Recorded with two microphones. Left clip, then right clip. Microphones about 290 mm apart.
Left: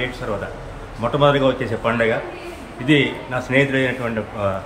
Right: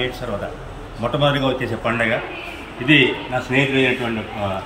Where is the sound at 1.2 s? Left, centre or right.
Centre.